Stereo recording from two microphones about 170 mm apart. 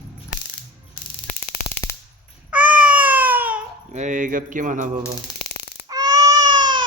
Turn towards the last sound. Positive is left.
turn(degrees=-25)  # may be behind; listen again after turning